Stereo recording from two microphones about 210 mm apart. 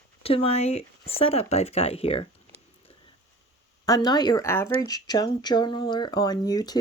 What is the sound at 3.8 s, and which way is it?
Speech, 20° left (ahead or behind).